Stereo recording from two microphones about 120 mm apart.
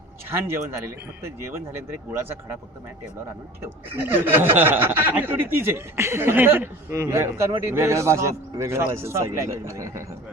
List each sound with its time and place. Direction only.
0.3 s speech: 20° right (ahead or behind)
3.6 s speech: 20° right (ahead or behind)